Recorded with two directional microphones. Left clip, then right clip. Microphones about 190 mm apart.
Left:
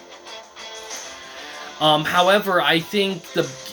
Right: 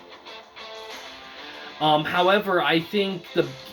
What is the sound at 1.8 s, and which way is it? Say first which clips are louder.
Speech: left 4 dB; 15° left (ahead or behind).